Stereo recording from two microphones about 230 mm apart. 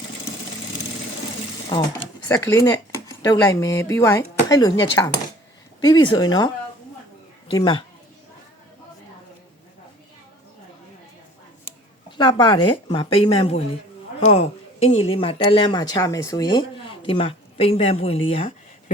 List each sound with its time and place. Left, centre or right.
1.7 s speech: centre
7.5 s speech: left
12.1 s speech: centre